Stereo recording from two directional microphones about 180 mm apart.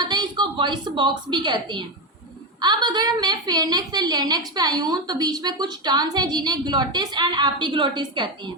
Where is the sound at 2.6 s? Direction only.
25° right (ahead or behind).